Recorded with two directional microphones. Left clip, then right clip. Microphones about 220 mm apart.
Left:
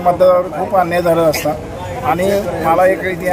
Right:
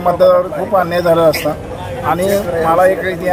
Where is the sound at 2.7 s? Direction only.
Centre (ahead or behind).